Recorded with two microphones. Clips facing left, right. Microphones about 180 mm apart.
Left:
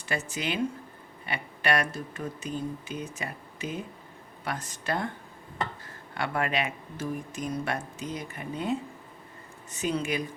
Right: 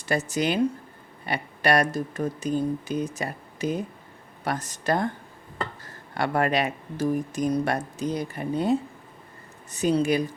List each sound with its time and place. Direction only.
0.0 s speech: 40° right (ahead or behind)